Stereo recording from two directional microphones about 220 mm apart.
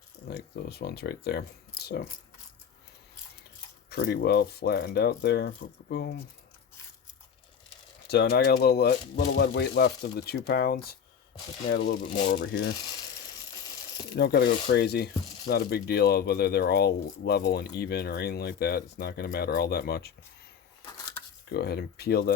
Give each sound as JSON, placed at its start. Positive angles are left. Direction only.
{"t": 0.3, "sound": "speech", "side_deg": 45}
{"t": 3.8, "sound": "speech", "side_deg": 45}
{"t": 8.0, "sound": "speech", "side_deg": 45}
{"t": 14.2, "sound": "speech", "side_deg": 45}
{"t": 21.5, "sound": "speech", "side_deg": 45}